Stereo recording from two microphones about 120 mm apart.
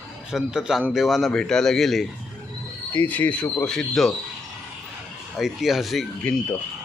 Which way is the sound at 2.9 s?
15° left (ahead or behind).